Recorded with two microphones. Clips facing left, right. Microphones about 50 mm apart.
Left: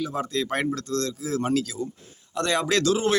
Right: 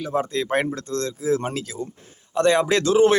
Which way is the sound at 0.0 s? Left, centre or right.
Right.